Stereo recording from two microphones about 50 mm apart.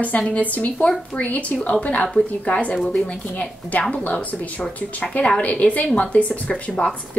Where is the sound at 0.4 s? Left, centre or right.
Left.